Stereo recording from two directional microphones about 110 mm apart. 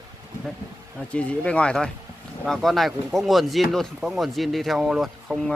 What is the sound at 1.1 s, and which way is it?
Speech, 10° left (ahead or behind).